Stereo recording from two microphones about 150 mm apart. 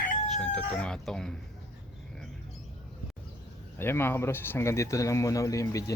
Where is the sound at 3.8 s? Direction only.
15° left (ahead or behind).